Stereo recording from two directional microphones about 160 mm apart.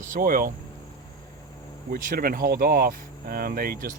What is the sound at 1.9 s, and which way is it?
Speech, 60° right (ahead or behind).